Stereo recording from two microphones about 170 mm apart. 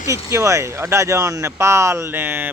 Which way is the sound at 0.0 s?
15° right (ahead or behind).